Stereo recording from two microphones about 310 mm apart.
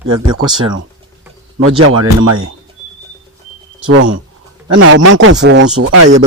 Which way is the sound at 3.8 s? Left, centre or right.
Right.